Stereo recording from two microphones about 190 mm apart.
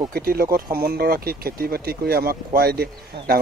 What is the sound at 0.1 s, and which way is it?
Speech, 50° right (ahead or behind).